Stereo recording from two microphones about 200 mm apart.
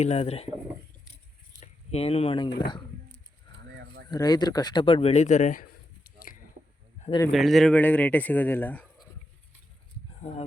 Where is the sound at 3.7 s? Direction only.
60° right (ahead or behind).